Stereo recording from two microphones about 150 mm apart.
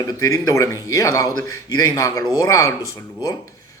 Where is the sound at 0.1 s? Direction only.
20° left (ahead or behind).